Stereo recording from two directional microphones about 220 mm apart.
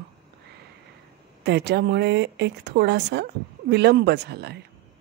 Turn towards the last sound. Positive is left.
turn(degrees=-50)  # may be behind; listen again after turning